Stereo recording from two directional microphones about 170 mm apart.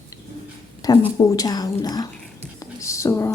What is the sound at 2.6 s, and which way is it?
Whispering, 20° left (ahead or behind).